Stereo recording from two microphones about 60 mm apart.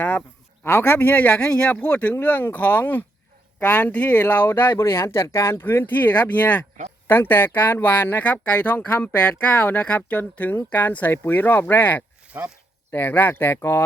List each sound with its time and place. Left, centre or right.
0.6 s speech: left
12.3 s speech: right
13.1 s speech: left